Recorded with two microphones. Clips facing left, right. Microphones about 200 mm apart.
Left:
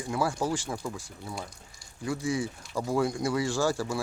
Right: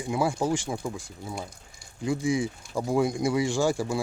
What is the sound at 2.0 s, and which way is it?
Speech, 15° right (ahead or behind).